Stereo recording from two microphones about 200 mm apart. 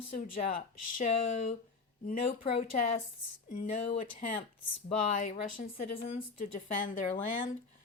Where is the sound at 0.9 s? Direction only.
40° left (ahead or behind).